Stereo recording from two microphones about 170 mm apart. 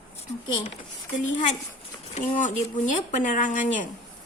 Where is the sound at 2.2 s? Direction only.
45° left (ahead or behind).